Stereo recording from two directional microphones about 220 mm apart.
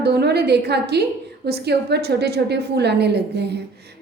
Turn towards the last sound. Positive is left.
turn(degrees=-50)  # may be behind; listen again after turning